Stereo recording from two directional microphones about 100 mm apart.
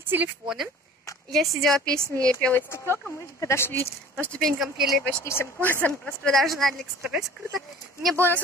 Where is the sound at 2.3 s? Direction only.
20° left (ahead or behind).